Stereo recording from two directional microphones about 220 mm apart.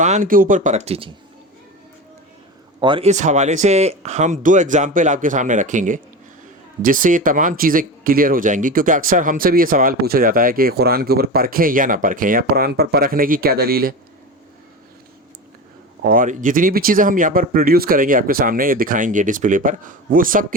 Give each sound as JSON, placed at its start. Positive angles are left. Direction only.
{"t": 0.0, "sound": "speech", "side_deg": -35}
{"t": 2.8, "sound": "speech", "side_deg": -25}
{"t": 16.0, "sound": "speech", "side_deg": -35}